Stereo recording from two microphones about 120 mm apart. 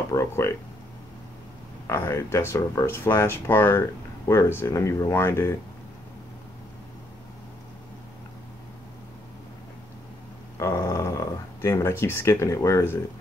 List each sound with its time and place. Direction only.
0.1 s speech: 25° left (ahead or behind)
1.9 s speech: 25° left (ahead or behind)
10.6 s speech: 25° left (ahead or behind)